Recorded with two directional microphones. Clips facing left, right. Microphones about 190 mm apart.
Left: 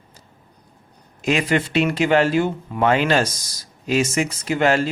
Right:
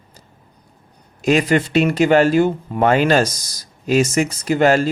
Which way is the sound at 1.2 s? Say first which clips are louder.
Right 4 dB; 40° right (ahead or behind).